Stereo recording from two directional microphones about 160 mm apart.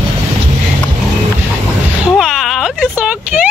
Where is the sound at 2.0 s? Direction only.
Centre (ahead or behind).